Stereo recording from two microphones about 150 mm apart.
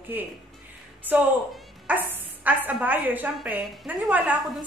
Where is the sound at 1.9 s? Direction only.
10° right (ahead or behind).